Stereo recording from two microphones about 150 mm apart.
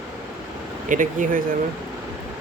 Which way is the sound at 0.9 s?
60° right (ahead or behind).